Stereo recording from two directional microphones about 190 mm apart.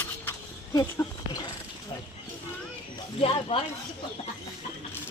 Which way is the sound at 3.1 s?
30° left (ahead or behind).